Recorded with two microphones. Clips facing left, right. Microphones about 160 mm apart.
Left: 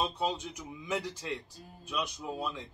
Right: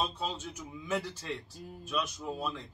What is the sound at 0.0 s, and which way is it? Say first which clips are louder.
A man's voice: left 3 dB; 15° left (ahead or behind).